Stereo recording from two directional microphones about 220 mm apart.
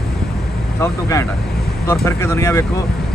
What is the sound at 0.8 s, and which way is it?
Speech, 15° left (ahead or behind).